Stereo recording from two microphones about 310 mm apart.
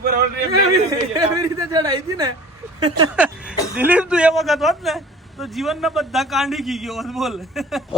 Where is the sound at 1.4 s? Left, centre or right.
Centre.